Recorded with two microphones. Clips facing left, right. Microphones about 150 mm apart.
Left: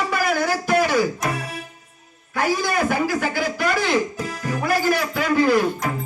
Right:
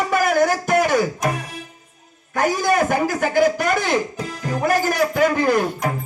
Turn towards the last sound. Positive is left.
turn(degrees=-45)  # may be behind; listen again after turning